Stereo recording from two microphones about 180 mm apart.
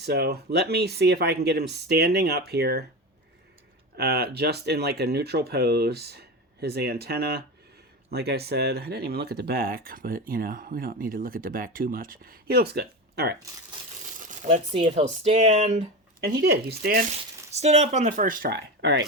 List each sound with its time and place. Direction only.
0.0 s speech: 65° right (ahead or behind)
3.9 s speech: 65° right (ahead or behind)
14.2 s speech: 45° right (ahead or behind)
16.2 s speech: 60° right (ahead or behind)
17.1 s speech: 35° right (ahead or behind); by 19.0 s 65° right (ahead or behind)